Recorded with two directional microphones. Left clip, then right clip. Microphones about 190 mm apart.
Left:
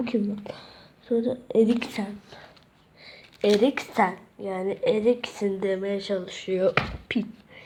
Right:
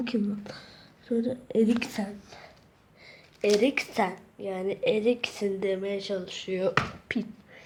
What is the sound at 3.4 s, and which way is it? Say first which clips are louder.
A woman's voice: left 2 dB; 10° left (ahead or behind).